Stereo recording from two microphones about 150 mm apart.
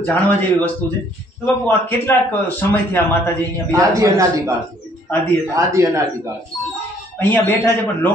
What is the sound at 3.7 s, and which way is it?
Speech, 20° right (ahead or behind).